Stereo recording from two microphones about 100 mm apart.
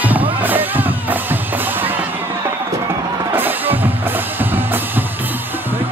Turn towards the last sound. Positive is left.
turn(degrees=-20)  # may be behind; listen again after turning